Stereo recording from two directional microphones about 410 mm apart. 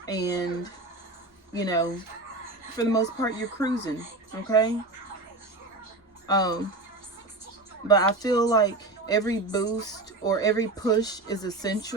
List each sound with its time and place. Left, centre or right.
0.0 s speech: centre
6.2 s speech: centre
7.9 s speech: centre